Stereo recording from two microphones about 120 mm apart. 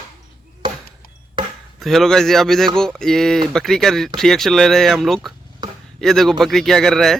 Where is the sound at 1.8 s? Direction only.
Centre (ahead or behind).